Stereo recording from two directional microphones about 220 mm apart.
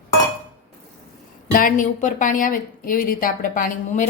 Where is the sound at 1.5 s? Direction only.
40° left (ahead or behind).